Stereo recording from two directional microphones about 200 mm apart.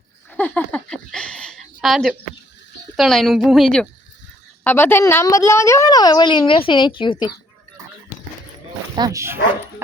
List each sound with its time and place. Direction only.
0.3 s a sound: 5° left (ahead or behind)
2.9 s a woman's voice: centre (ahead or behind); by 7.3 s 25° left (ahead or behind)
9.0 s speech: 15° right (ahead or behind)